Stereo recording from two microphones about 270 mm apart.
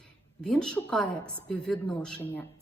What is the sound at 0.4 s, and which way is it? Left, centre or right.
A woman's voice, centre.